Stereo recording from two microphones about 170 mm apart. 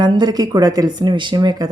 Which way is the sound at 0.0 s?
25° right (ahead or behind).